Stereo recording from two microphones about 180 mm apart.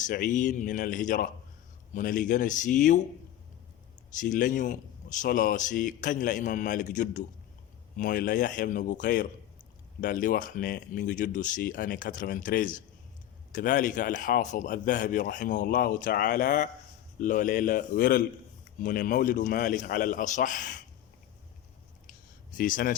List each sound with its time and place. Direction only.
0.0 s a man's voice: 45° left (ahead or behind)
4.1 s a man's voice: 45° left (ahead or behind)
22.5 s a man's voice: 50° left (ahead or behind)